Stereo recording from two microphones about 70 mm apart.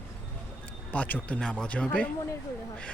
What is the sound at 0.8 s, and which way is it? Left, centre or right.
Speech, left.